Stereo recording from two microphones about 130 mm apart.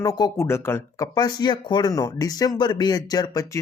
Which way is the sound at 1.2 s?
35° left (ahead or behind).